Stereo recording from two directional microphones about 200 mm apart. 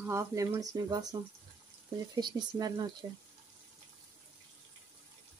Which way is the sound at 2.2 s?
20° right (ahead or behind).